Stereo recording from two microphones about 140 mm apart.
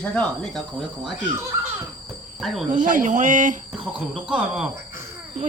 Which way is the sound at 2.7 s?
70° right (ahead or behind).